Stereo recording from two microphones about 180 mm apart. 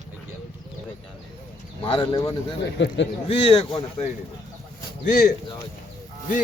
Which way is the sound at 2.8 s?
85° left.